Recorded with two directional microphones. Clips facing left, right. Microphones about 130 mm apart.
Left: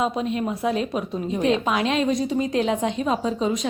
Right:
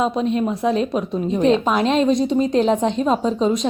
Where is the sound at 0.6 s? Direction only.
25° right (ahead or behind).